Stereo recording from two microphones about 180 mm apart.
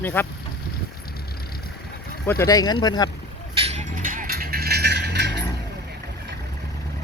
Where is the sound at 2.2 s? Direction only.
15° left (ahead or behind).